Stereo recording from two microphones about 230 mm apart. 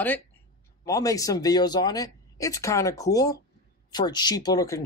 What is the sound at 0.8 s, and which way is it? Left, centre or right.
Speech, centre.